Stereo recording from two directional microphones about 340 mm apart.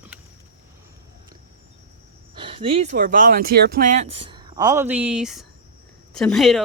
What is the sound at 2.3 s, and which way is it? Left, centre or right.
Speech, centre.